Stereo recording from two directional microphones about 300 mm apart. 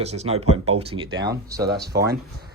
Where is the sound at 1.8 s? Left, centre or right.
Right.